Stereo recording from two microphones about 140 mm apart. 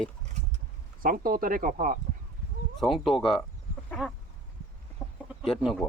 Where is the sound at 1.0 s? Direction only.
85° right.